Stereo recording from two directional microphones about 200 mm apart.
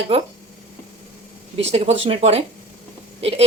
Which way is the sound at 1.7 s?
30° right (ahead or behind).